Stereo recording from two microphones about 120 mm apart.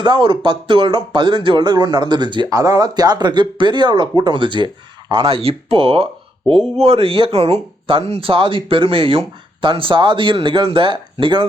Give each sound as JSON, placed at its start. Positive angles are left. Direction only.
{"t": 0.0, "sound": "speech", "side_deg": -40}